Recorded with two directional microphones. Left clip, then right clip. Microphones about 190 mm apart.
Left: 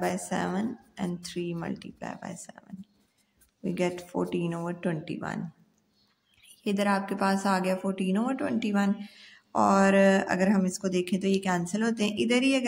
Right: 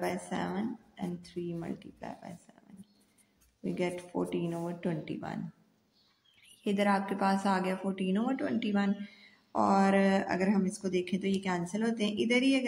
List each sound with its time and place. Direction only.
0.0 s speech: 30° left (ahead or behind)
3.6 s speech: 35° left (ahead or behind)
6.4 s a woman's voice: 20° left (ahead or behind)